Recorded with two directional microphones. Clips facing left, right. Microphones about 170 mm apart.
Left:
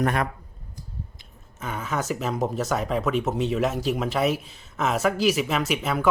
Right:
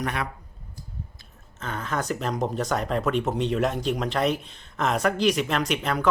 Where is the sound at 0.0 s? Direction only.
45° left (ahead or behind).